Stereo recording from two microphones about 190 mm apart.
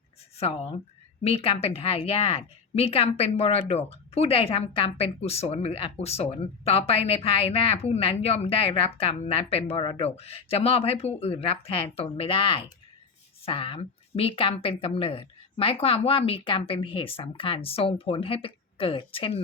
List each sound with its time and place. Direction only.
0.3 s a woman's voice: 30° left (ahead or behind)